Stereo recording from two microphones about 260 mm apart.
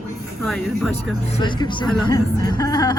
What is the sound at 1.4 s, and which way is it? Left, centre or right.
Speech, centre.